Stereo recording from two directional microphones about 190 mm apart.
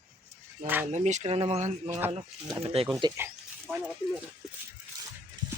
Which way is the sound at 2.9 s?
15° right (ahead or behind).